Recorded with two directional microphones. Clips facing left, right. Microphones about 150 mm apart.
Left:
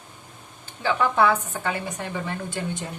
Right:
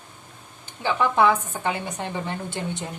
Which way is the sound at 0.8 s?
20° right (ahead or behind).